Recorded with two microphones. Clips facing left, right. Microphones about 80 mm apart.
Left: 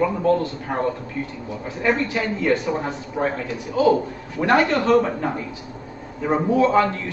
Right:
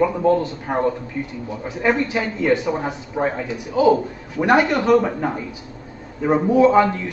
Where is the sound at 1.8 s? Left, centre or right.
Centre.